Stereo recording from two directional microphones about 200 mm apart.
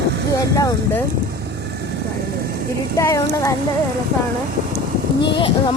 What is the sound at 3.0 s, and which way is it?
Speech, 15° left (ahead or behind).